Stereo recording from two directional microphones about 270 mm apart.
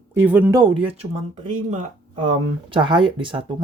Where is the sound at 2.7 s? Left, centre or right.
Centre.